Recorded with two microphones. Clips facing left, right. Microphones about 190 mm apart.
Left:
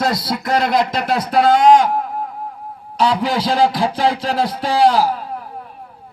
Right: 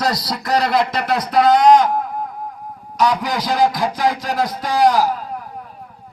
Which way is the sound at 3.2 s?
15° right (ahead or behind).